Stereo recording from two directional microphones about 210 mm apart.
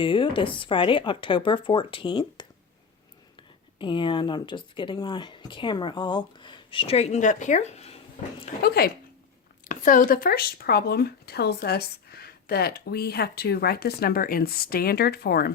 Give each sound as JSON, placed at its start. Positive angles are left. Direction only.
{"t": 0.0, "sound": "speech", "side_deg": 25}
{"t": 3.8, "sound": "speech", "side_deg": 25}
{"t": 8.6, "sound": "speech", "side_deg": 50}